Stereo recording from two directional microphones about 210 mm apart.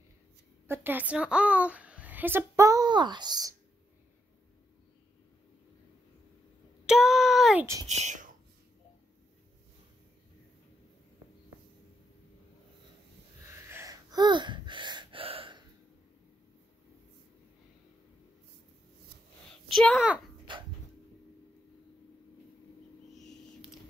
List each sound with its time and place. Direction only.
0.7 s a woman's voice: 10° right (ahead or behind)
6.9 s a sound: centre (ahead or behind)
7.9 s speech: 35° right (ahead or behind)
13.5 s gasp: 10° right (ahead or behind)
19.7 s a child's voice: centre (ahead or behind)
20.5 s dog: 20° right (ahead or behind)
23.1 s a sound: centre (ahead or behind)